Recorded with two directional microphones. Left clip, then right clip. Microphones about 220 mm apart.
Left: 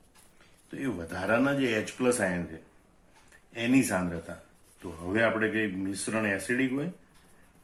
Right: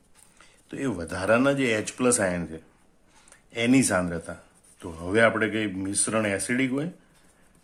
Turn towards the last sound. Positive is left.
turn(degrees=-45)  # may be behind; listen again after turning